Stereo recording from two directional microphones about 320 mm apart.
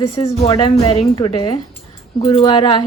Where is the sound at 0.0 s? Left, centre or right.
Centre.